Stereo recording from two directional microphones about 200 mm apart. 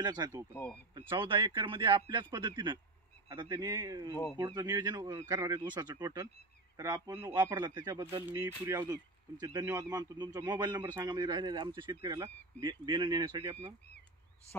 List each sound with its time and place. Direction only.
0.0 s a man's voice: 20° right (ahead or behind)